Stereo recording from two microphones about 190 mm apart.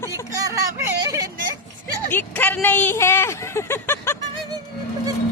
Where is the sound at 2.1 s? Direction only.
10° left (ahead or behind).